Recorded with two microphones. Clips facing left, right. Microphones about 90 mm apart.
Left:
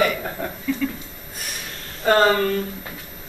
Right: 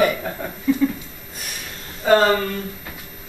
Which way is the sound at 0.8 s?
25° right (ahead or behind).